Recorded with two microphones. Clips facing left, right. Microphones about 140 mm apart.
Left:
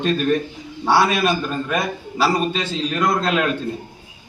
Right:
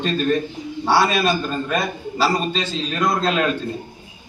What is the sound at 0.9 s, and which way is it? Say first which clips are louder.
A man's voice: left 1 dB; 15° left (ahead or behind).